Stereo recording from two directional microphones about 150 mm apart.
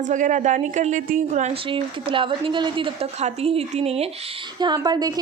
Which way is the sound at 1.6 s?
35° right (ahead or behind).